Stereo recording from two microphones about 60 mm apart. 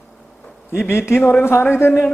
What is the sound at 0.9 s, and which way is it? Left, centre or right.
A man's voice, left.